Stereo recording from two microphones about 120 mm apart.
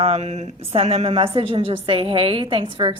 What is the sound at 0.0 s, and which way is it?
A woman's voice, 60° right (ahead or behind).